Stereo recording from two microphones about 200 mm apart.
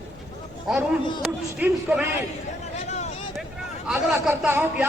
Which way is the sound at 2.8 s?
35° left (ahead or behind).